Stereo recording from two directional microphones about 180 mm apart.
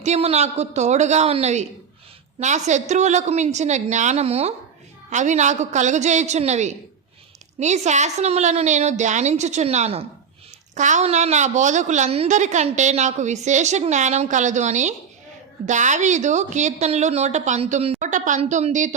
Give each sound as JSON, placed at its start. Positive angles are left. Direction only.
{"t": 0.0, "sound": "a woman's voice", "side_deg": -35}